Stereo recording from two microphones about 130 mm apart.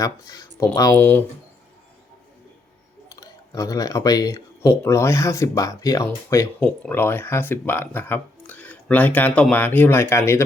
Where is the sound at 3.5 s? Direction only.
25° left (ahead or behind).